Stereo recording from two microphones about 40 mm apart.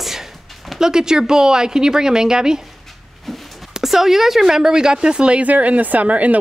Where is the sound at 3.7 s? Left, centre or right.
Centre.